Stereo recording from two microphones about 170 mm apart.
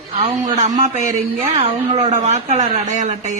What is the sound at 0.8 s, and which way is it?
A woman's voice, 45° right (ahead or behind).